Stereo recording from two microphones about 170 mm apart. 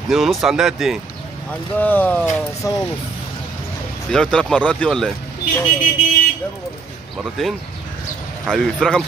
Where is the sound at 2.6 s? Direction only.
20° left (ahead or behind).